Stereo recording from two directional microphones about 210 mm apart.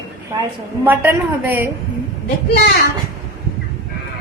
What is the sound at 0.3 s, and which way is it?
A woman's voice, 15° right (ahead or behind).